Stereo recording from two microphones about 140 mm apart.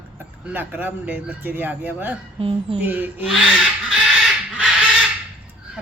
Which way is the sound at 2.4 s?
40° right (ahead or behind).